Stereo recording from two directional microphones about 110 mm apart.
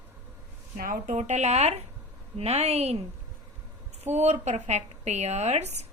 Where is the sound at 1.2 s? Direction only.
90° right.